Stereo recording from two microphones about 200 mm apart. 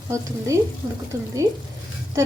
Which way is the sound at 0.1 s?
15° right (ahead or behind).